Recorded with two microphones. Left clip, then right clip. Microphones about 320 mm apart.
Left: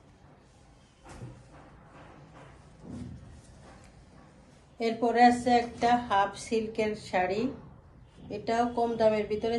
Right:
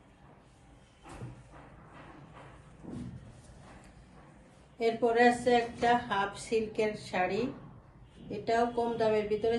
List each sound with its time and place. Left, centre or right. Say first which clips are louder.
4.7 s a woman's voice: left 2 dB; centre